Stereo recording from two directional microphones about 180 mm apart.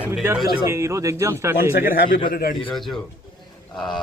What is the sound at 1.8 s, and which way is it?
Speech, 55° left (ahead or behind).